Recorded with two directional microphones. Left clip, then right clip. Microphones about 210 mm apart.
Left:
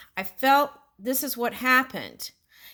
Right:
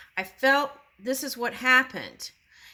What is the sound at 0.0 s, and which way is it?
Speech, 50° left (ahead or behind).